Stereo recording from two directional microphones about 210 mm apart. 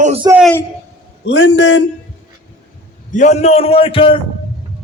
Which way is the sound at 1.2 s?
55° left (ahead or behind).